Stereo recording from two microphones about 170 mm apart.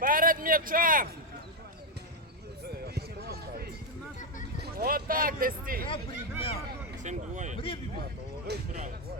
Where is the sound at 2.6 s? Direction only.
65° right (ahead or behind).